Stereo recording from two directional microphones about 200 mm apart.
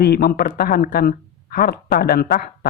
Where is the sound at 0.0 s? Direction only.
50° left (ahead or behind).